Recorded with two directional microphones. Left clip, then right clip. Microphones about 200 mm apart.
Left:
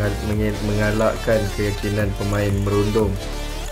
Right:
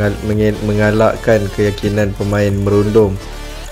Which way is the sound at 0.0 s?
35° right (ahead or behind).